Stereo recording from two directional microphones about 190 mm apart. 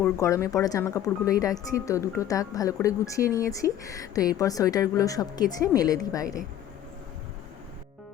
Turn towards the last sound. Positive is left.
turn(degrees=20)  # may be behind; listen again after turning